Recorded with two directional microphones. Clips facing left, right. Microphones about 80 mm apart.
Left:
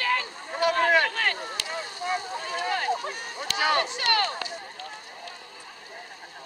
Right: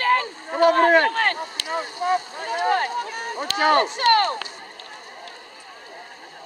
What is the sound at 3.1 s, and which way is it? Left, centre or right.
Run, right.